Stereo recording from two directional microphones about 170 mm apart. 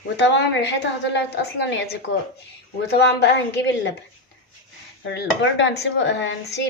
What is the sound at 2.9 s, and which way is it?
Speech, 75° left (ahead or behind).